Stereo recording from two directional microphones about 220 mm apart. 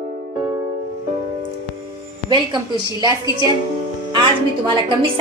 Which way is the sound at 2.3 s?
20° right (ahead or behind).